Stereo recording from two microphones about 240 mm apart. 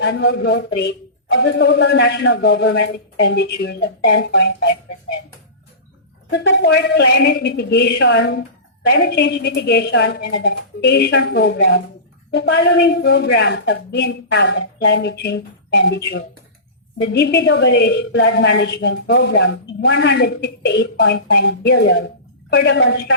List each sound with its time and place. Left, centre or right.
0.0 s a woman's voice: left
6.4 s a woman's voice: left